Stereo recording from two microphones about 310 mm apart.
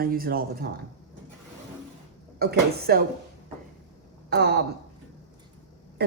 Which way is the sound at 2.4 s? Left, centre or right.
Right.